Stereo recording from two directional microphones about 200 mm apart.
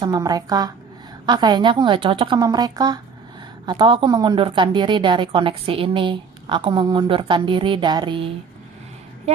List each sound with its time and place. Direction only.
0.0 s a woman's voice: 20° right (ahead or behind)